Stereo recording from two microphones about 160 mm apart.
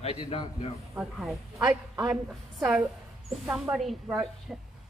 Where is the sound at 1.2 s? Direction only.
Centre (ahead or behind).